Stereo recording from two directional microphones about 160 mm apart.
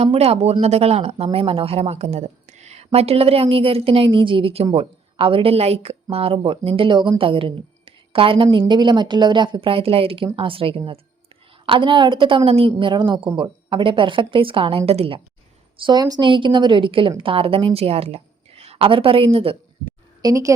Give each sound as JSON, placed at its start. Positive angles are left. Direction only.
{"t": 0.0, "sound": "speech", "side_deg": -40}
{"t": 15.8, "sound": "speech", "side_deg": -25}
{"t": 20.2, "sound": "a woman's voice", "side_deg": -20}